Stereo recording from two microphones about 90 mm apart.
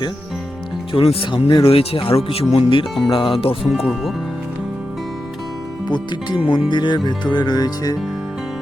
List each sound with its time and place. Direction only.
0.9 s speech: 75° left (ahead or behind)
1.6 s speech: 90° left
3.6 s speech: 5° right (ahead or behind)
5.9 s speech: 60° left (ahead or behind); by 7.9 s 45° left (ahead or behind)